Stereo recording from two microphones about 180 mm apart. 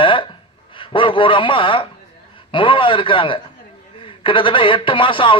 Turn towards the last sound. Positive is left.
turn(degrees=30)  # may be behind; listen again after turning